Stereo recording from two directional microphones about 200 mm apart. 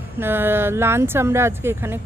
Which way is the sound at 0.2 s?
10° right (ahead or behind).